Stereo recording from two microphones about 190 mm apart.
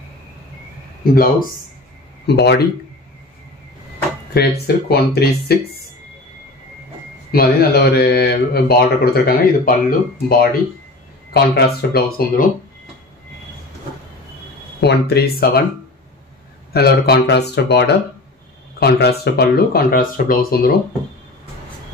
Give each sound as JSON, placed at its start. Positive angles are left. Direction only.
{"t": 1.0, "sound": "speech", "side_deg": 50}
{"t": 2.2, "sound": "speech", "side_deg": 60}
{"t": 4.3, "sound": "speech", "side_deg": 55}
{"t": 7.2, "sound": "speech", "side_deg": 55}
{"t": 11.3, "sound": "speech", "side_deg": 55}
{"t": 14.8, "sound": "speech", "side_deg": 60}
{"t": 16.7, "sound": "speech", "side_deg": 55}